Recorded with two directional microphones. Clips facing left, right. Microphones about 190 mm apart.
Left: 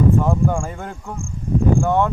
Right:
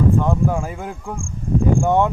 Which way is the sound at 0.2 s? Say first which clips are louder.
Even; centre (ahead or behind).